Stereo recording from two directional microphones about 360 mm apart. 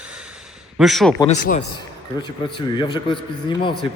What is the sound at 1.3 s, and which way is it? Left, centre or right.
A man's voice, left.